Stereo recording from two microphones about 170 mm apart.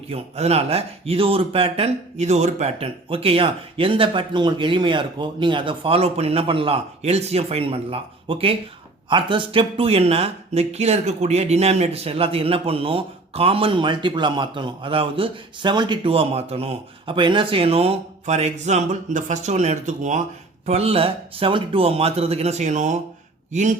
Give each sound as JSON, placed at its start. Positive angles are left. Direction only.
{"t": 0.1, "sound": "speech", "side_deg": -35}